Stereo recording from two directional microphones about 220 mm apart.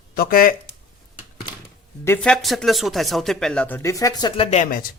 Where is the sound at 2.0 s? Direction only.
5° left (ahead or behind).